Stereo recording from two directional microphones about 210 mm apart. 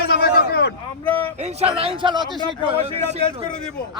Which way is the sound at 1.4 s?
30° right (ahead or behind).